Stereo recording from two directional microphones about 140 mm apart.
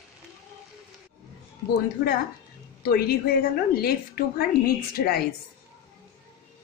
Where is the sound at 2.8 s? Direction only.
90° left.